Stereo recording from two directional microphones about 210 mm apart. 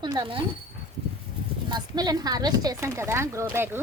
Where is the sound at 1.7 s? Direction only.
20° right (ahead or behind).